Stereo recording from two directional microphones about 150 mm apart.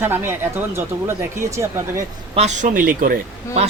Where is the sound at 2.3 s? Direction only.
50° right (ahead or behind); by 3.2 s 65° right (ahead or behind).